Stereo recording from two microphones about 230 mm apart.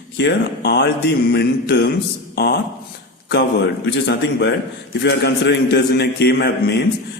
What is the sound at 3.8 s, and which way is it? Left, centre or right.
A man's voice, left.